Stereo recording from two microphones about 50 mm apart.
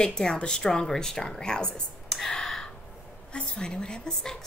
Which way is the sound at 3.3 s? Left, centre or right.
Centre.